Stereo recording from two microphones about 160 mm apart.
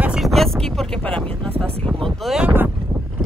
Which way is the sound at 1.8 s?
5° left (ahead or behind).